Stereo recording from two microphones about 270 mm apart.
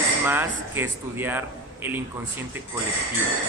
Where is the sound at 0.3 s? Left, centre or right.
Centre.